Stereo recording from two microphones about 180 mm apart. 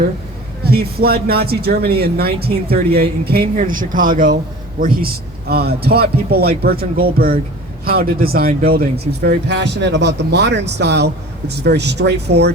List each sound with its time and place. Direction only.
0.6 s speech: 60° right (ahead or behind)